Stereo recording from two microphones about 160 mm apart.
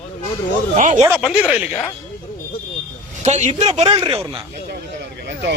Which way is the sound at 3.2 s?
45° right (ahead or behind).